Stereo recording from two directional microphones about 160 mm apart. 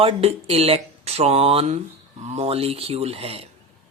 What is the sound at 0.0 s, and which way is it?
Speech, 40° right (ahead or behind).